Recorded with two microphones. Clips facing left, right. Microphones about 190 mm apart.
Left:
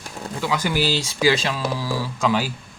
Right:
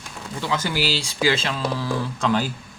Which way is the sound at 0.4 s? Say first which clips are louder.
Left 2 dB; 15° left (ahead or behind).